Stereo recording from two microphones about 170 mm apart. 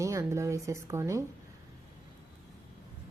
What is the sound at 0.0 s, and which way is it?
A woman's voice, 15° right (ahead or behind).